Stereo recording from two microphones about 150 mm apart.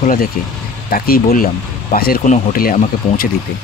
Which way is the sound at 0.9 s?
80° left.